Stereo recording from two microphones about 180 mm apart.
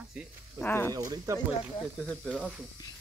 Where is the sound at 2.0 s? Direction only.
5° left (ahead or behind).